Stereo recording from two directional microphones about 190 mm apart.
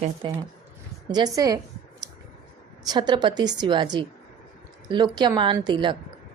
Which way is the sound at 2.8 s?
20° right (ahead or behind).